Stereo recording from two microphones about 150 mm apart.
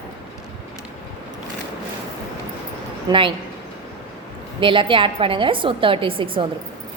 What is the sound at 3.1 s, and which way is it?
Speech, 35° right (ahead or behind).